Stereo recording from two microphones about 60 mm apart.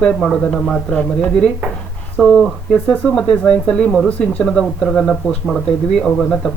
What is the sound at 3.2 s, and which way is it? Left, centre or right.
Speech, centre.